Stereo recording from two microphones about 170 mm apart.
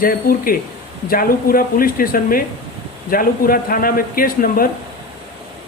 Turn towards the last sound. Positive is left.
turn(degrees=55)  # may be behind; listen again after turning